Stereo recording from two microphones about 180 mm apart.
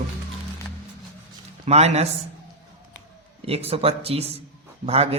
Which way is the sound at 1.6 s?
35° right (ahead or behind).